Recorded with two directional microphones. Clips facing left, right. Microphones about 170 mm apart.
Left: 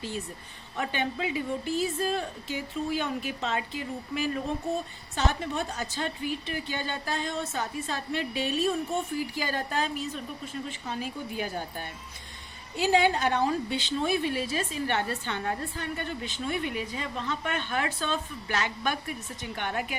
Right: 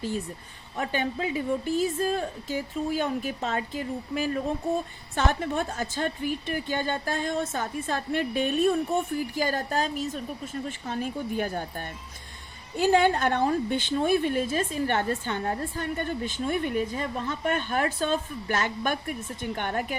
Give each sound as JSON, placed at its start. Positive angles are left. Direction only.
{"t": 0.8, "sound": "a woman's voice", "side_deg": -40}